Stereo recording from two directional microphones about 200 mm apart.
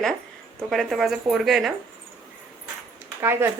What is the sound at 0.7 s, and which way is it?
Speech, centre (ahead or behind).